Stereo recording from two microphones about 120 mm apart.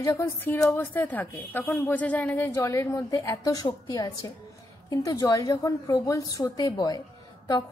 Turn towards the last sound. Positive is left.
turn(degrees=35)  # may be behind; listen again after turning